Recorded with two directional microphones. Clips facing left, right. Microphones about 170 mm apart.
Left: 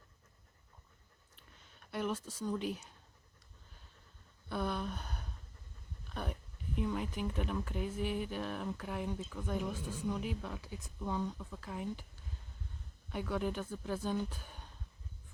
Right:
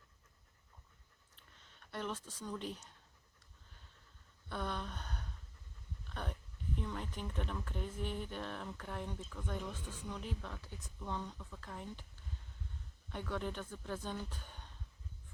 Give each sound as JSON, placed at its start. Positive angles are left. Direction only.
{"t": 1.4, "sound": "speech", "side_deg": 10}
{"t": 4.4, "sound": "a sound", "side_deg": 10}
{"t": 6.2, "sound": "speech", "side_deg": 10}
{"t": 13.1, "sound": "speech", "side_deg": 10}